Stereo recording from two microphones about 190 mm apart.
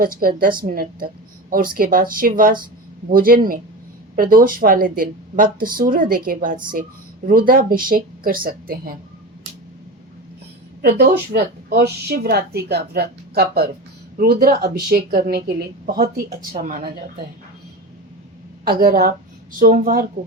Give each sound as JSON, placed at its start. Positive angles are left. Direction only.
{"t": 0.0, "sound": "a woman's voice", "side_deg": -50}
{"t": 10.8, "sound": "a woman's voice", "side_deg": -55}
{"t": 18.6, "sound": "a woman's voice", "side_deg": -50}